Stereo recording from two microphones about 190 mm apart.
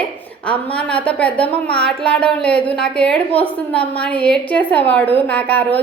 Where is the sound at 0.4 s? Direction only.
5° left (ahead or behind).